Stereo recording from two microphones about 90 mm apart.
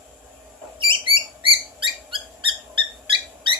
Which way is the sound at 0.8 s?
70° right (ahead or behind).